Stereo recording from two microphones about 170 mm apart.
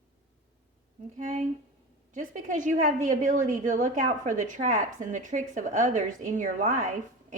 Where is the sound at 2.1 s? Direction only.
50° right (ahead or behind).